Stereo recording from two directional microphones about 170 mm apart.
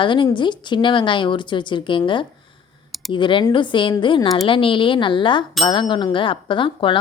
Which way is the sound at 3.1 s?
30° left (ahead or behind).